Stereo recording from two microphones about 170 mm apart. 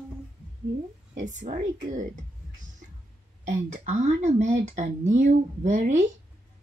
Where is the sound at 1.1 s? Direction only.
45° right (ahead or behind).